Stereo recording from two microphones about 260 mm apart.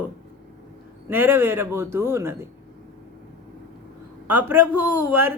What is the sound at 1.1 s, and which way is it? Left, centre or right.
Speech, centre.